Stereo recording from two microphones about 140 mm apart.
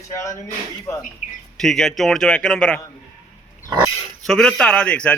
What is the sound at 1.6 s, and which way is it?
A man's voice, centre (ahead or behind).